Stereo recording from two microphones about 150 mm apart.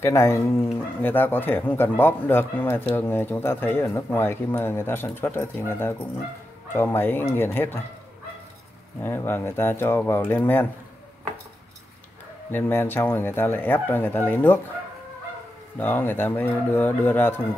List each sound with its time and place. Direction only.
0.0 s speech: 20° left (ahead or behind)
9.0 s speech: 15° left (ahead or behind)
12.4 s speech: 15° left (ahead or behind)
15.8 s speech: 15° left (ahead or behind)